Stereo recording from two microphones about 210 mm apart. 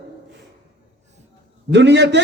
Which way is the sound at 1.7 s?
55° right (ahead or behind).